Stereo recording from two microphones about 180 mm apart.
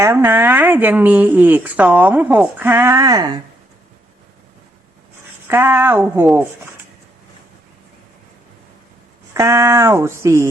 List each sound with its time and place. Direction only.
0.0 s speech: 15° right (ahead or behind)
5.5 s speech: 10° right (ahead or behind)
9.3 s speech: 15° right (ahead or behind)